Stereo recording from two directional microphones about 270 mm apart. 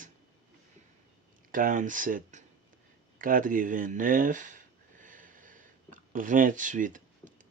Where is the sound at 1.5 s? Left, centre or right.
Right.